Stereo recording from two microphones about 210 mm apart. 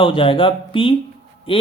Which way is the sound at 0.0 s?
25° left (ahead or behind).